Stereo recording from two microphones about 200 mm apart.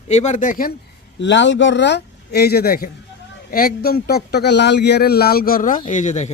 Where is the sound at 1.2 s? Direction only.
65° left (ahead or behind).